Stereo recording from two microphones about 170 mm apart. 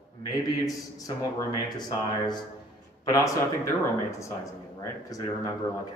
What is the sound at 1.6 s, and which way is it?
A man's voice, 25° left (ahead or behind).